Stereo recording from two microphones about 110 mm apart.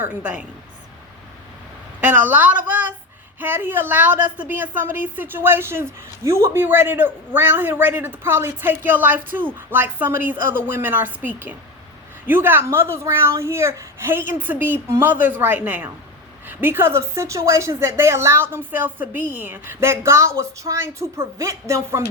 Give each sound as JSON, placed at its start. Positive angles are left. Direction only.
{"t": 0.0, "sound": "a woman's voice", "side_deg": -15}
{"t": 2.0, "sound": "a woman's voice", "side_deg": -15}